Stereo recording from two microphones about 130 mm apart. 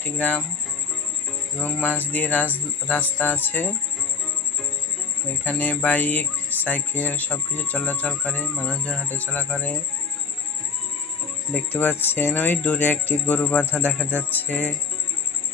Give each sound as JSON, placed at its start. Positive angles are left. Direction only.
{"t": 0.0, "sound": "speech", "side_deg": 10}
{"t": 2.1, "sound": "speech", "side_deg": 15}
{"t": 5.4, "sound": "speech", "side_deg": 10}
{"t": 11.5, "sound": "speech", "side_deg": 15}